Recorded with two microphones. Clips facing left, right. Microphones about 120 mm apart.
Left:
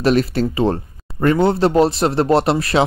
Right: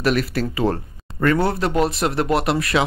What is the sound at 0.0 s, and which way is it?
Speech, 25° left (ahead or behind).